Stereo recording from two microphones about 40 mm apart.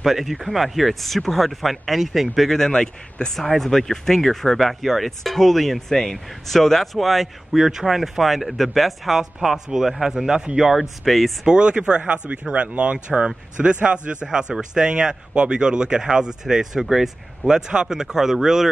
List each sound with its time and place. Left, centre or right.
0.0 s speech: centre
2.5 s speech: centre
3.3 s speech: centre
10.8 s speech: centre
11.4 s speech: right
14.5 s speech: centre